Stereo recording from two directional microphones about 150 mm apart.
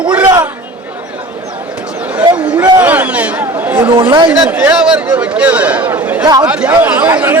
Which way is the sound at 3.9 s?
30° right (ahead or behind).